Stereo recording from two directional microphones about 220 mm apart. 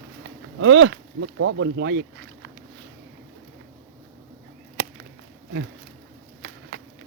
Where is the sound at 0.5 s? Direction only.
60° right (ahead or behind).